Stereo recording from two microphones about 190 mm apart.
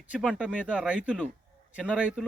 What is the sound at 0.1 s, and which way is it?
Speech, 5° right (ahead or behind).